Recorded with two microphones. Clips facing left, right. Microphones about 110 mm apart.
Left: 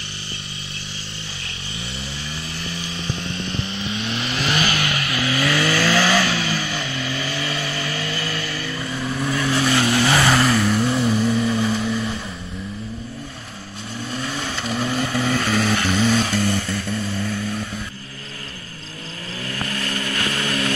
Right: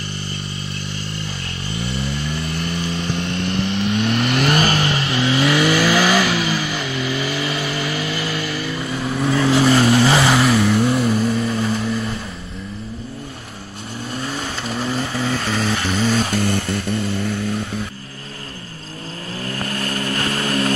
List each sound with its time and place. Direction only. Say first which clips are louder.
1.8 s vehicle: right 8 dB; 60° right (ahead or behind); by 7.4 s 10° right (ahead or behind)
7.4 s vehicle: right 3 dB; 25° right (ahead or behind)
10.2 s vehicle: right 2 dB; 10° right (ahead or behind)
14.3 s vehicle: even; centre (ahead or behind)
19.4 s vehicle: right 2 dB; 35° right (ahead or behind)